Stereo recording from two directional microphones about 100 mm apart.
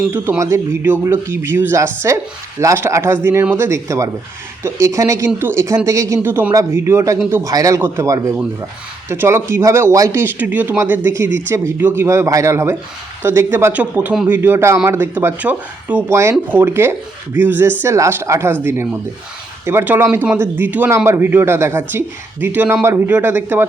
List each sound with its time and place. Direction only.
0.1 s speech: 25° right (ahead or behind)
6.2 s speech: 20° right (ahead or behind)
7.5 s a man's voice: 35° right (ahead or behind); by 23.6 s 20° right (ahead or behind)